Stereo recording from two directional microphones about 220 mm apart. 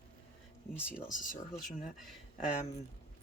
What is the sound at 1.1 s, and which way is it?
Speech, 35° left (ahead or behind).